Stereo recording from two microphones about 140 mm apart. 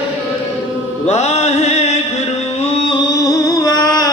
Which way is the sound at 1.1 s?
50° left (ahead or behind).